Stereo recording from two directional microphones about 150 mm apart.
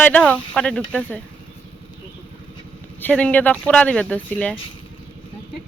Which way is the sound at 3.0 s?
10° left (ahead or behind).